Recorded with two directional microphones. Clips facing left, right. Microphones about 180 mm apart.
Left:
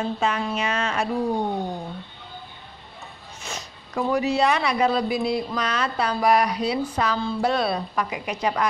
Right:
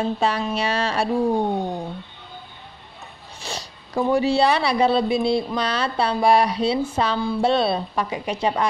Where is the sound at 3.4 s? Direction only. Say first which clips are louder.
Right 3 dB; 30° right (ahead or behind).